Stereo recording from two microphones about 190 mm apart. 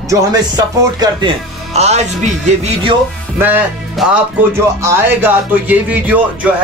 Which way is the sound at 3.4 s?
10° right (ahead or behind).